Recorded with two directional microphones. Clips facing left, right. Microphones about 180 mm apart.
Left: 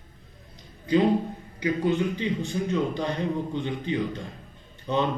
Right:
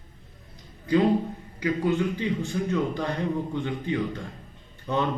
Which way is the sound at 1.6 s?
20° left (ahead or behind).